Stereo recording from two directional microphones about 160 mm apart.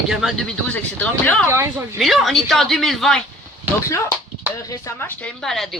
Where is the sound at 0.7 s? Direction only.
10° left (ahead or behind).